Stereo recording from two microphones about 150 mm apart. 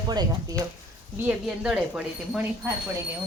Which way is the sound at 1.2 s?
5° right (ahead or behind).